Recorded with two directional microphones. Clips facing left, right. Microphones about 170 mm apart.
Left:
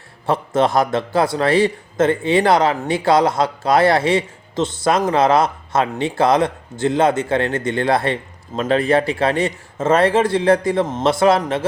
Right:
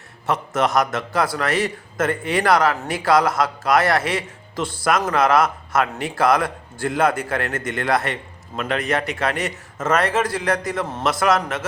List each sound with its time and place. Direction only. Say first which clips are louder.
0.3 s speech: left 4 dB; 30° left (ahead or behind)